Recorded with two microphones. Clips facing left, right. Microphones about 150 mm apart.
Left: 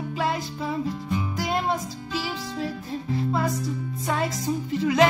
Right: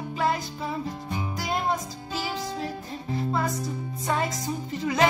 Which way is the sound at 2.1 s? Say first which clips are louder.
Right 1 dB; 40° right (ahead or behind).